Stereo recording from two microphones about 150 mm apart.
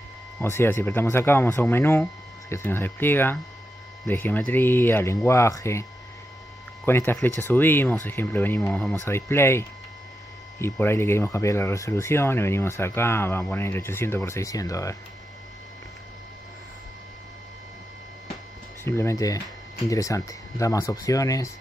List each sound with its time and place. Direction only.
0.4 s speech: 15° left (ahead or behind)
18.9 s speech: 20° left (ahead or behind)